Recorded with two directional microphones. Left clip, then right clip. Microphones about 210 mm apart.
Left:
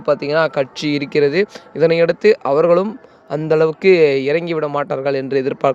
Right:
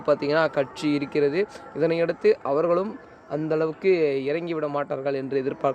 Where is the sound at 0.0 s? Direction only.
25° left (ahead or behind).